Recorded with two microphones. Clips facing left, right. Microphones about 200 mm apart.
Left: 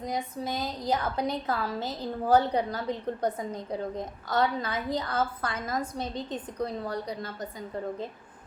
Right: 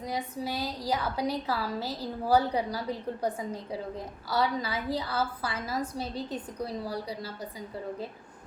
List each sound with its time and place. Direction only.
0.0 s a woman's voice: 10° right (ahead or behind)